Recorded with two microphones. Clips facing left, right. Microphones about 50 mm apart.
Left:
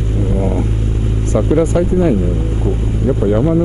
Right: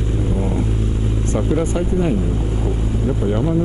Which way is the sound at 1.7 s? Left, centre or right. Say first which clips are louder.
Left 6 dB; left.